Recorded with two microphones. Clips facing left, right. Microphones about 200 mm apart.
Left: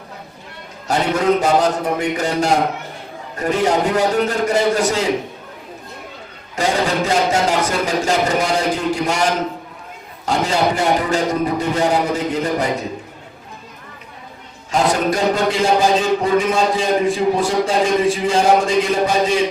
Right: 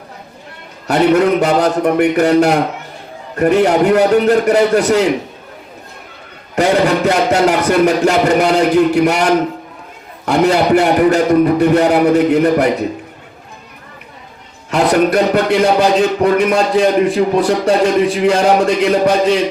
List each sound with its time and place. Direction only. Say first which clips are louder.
0.9 s a man's voice: right 6 dB; 65° right (ahead or behind)
6.6 s a man's voice: right 6 dB; 65° right (ahead or behind)
14.7 s a man's voice: right 5 dB; 65° right (ahead or behind)